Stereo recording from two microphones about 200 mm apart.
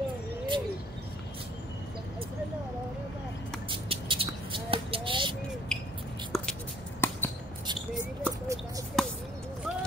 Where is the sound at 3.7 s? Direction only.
25° right (ahead or behind).